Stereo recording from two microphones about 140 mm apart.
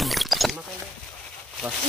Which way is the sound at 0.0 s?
Centre (ahead or behind).